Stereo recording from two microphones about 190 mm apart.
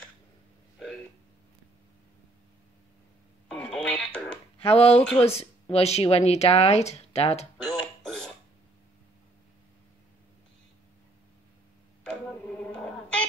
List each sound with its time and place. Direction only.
3.7 s music: 5° left (ahead or behind)
4.6 s speech: 30° left (ahead or behind)
7.6 s music: 5° left (ahead or behind)
12.0 s a sound: 5° left (ahead or behind)